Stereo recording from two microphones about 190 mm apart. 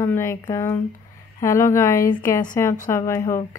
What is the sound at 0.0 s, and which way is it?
Speech, 15° left (ahead or behind).